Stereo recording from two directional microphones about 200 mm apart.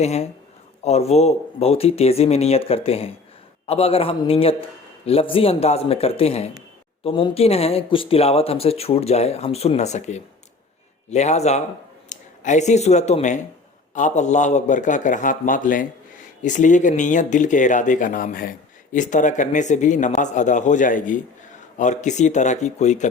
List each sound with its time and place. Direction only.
0.0 s speech: 35° left (ahead or behind)